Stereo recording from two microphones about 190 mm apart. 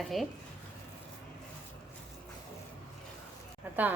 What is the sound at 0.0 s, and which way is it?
Speech, centre (ahead or behind).